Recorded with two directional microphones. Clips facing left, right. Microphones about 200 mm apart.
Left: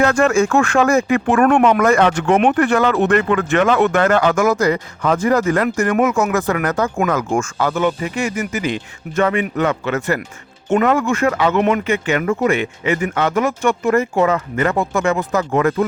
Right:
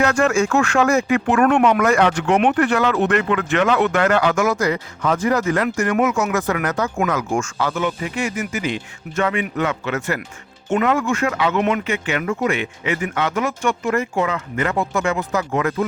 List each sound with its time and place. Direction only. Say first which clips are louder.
0.1 s speech: left 3 dB; 35° left (ahead or behind)
0.3 s speech: left 3 dB; 50° left (ahead or behind)